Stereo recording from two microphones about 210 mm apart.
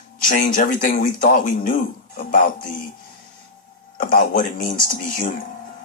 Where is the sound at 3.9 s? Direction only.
40° left (ahead or behind).